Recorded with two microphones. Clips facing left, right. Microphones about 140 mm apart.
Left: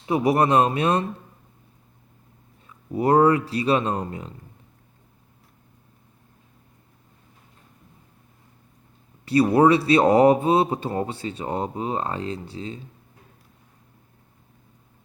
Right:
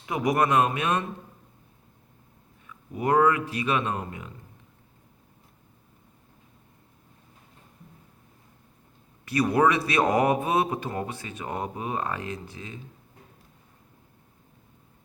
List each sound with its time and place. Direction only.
0.0 s speech: 30° left (ahead or behind)
2.6 s speech: 35° left (ahead or behind)
9.2 s speech: 30° left (ahead or behind)